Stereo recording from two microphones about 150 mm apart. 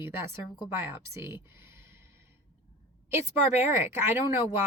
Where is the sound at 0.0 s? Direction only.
15° right (ahead or behind).